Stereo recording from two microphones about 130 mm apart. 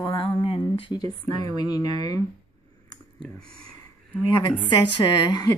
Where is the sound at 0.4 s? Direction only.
45° left (ahead or behind).